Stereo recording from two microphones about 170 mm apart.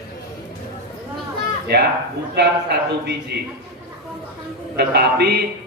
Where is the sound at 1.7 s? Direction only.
75° right (ahead or behind).